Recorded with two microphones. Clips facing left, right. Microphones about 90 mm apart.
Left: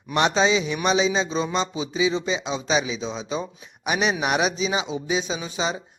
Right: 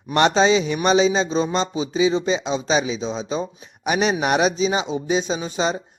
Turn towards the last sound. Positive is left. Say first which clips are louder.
# right 4 dB
turn(degrees=-45)  # may be behind; listen again after turning